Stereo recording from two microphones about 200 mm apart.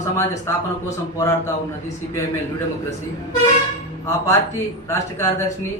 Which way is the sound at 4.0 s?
15° left (ahead or behind).